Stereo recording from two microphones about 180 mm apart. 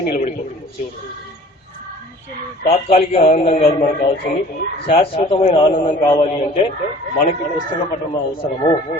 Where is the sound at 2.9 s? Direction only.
35° left (ahead or behind).